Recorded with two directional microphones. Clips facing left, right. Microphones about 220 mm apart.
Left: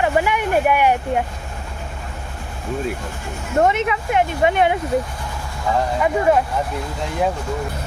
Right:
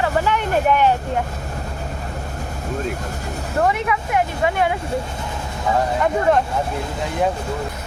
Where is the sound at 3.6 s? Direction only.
25° left (ahead or behind).